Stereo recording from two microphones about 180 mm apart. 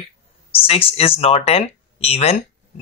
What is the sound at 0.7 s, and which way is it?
Speech, 30° left (ahead or behind).